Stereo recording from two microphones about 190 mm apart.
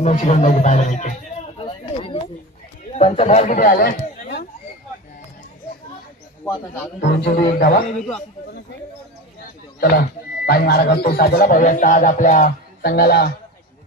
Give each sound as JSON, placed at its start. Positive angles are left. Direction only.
{"t": 0.0, "sound": "speech", "side_deg": 40}
{"t": 1.6, "sound": "a sound", "side_deg": 25}
{"t": 2.9, "sound": "speech", "side_deg": 30}
{"t": 3.5, "sound": "a sound", "side_deg": 50}
{"t": 7.0, "sound": "a man's voice", "side_deg": 60}
{"t": 9.8, "sound": "speech", "side_deg": 55}